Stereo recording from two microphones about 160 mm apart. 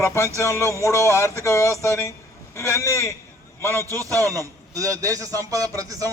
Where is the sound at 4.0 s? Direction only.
20° right (ahead or behind).